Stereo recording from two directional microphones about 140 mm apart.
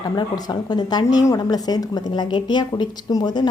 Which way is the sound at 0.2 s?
30° left (ahead or behind).